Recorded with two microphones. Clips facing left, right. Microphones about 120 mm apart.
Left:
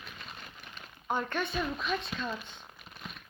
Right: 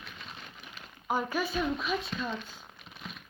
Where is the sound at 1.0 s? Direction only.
5° right (ahead or behind).